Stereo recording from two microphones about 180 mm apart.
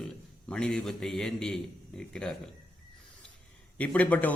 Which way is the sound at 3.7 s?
10° left (ahead or behind).